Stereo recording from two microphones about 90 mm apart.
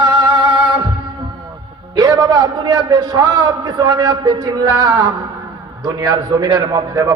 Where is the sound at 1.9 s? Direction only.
50° right (ahead or behind).